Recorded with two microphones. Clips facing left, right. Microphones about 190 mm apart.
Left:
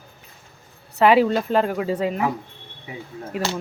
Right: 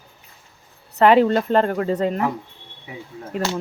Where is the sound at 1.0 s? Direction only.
10° left (ahead or behind).